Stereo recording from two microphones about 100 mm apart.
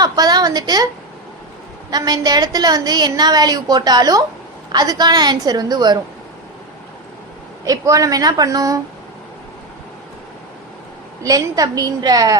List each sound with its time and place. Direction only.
0.0 s a woman's voice: 40° right (ahead or behind)
1.9 s a woman's voice: 40° right (ahead or behind)
7.6 s a woman's voice: 35° right (ahead or behind)
11.2 s a woman's voice: 35° right (ahead or behind)